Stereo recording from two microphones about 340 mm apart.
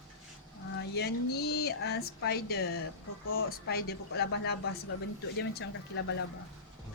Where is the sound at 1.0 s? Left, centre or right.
Left.